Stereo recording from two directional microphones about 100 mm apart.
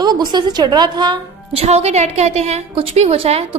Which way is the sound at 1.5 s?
90° right.